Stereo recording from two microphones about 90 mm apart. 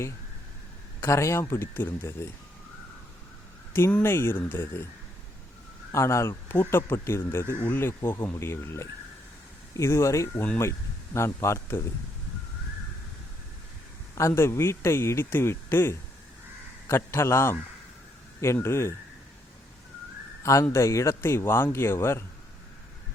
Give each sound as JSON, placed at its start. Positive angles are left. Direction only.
{"t": 1.0, "sound": "speech", "side_deg": 35}
{"t": 3.7, "sound": "speech", "side_deg": 25}
{"t": 5.9, "sound": "speech", "side_deg": 30}
{"t": 14.2, "sound": "speech", "side_deg": 30}
{"t": 20.4, "sound": "speech", "side_deg": 35}